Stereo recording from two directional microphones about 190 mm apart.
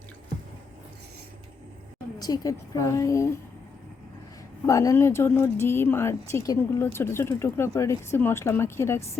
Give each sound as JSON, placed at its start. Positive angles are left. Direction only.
{"t": 2.1, "sound": "speech", "side_deg": 20}
{"t": 4.6, "sound": "speech", "side_deg": 15}